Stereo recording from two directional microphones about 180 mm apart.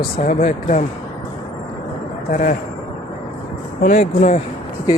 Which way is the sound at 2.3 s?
45° left (ahead or behind).